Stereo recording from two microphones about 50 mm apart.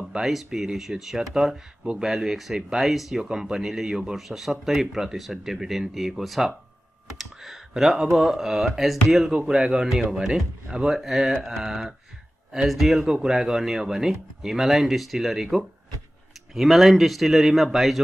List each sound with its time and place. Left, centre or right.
0.1 s speech: centre
9.3 s speech: centre